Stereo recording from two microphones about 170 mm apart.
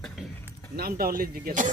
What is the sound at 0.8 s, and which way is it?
Speech, 60° right (ahead or behind).